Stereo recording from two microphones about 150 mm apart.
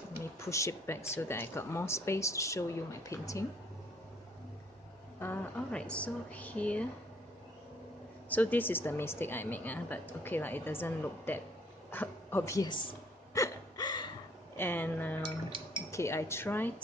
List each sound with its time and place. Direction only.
0.4 s speech: 20° left (ahead or behind)
5.2 s a woman's voice: 15° left (ahead or behind)
8.3 s a woman's voice: 10° left (ahead or behind)
13.3 s gasp: 25° left (ahead or behind)
14.6 s a woman's voice: 15° left (ahead or behind)